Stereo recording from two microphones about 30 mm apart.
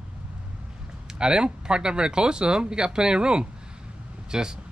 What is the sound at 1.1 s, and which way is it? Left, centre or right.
Speech, right.